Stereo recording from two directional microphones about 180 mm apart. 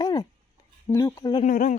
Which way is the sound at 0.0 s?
20° left (ahead or behind).